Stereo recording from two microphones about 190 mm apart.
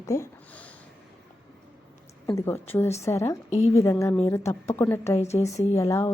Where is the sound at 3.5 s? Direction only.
35° left (ahead or behind).